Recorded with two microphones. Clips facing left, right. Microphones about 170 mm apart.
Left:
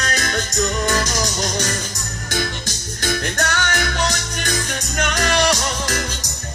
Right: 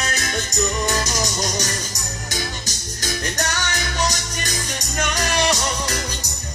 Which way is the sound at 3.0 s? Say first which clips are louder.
Left 4 dB; 55° left (ahead or behind).